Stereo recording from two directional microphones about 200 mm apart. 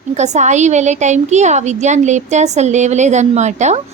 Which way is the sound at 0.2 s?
35° right (ahead or behind).